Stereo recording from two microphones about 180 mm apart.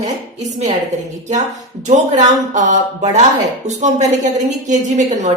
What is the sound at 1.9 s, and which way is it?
Speech, 45° right (ahead or behind).